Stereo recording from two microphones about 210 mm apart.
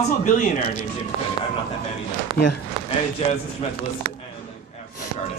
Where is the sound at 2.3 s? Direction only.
25° right (ahead or behind).